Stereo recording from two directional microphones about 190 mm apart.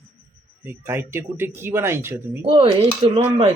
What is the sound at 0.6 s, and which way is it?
Speech, 10° right (ahead or behind).